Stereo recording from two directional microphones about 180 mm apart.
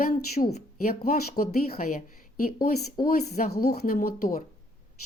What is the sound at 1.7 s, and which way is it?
Speech, 50° left (ahead or behind).